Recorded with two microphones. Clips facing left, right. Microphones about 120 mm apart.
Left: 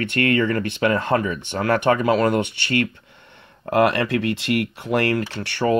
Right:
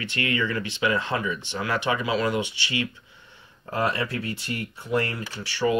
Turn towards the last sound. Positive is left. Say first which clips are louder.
# left 3 dB
turn(degrees=55)  # may be behind; listen again after turning